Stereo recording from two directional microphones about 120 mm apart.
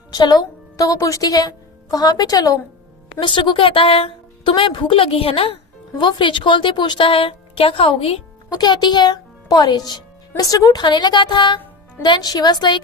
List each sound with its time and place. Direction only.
0.1 s speech: 35° left (ahead or behind)
3.2 s a woman's voice: 40° left (ahead or behind)
6.0 s a woman's voice: 40° left (ahead or behind)
8.5 s speech: 35° left (ahead or behind)